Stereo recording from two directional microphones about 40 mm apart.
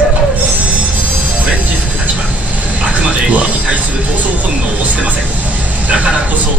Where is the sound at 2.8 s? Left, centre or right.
Right.